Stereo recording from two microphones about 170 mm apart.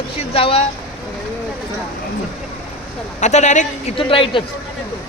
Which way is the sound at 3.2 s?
45° left (ahead or behind).